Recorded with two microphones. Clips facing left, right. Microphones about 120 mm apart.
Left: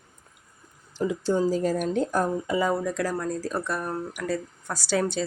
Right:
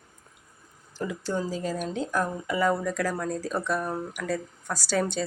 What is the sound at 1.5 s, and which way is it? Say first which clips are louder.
Speech: left 6 dB; 50° left (ahead or behind).